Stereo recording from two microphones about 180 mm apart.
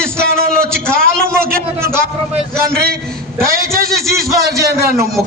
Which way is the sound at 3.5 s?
55° right (ahead or behind).